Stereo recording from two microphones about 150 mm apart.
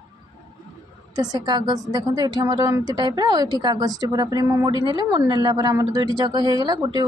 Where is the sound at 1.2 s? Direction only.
30° right (ahead or behind).